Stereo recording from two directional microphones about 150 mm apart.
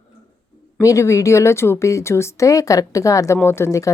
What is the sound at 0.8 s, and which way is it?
A woman's voice, 20° left (ahead or behind).